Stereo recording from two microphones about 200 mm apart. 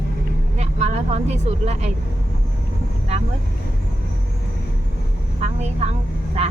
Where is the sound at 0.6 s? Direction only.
35° right (ahead or behind).